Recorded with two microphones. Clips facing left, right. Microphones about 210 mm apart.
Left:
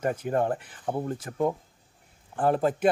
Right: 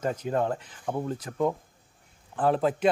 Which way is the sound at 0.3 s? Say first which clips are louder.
Left 1 dB; 15° left (ahead or behind).